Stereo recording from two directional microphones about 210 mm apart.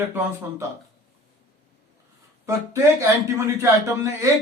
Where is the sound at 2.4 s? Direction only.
15° right (ahead or behind).